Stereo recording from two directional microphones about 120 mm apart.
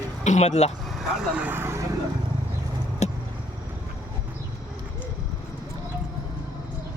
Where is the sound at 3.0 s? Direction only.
70° left (ahead or behind).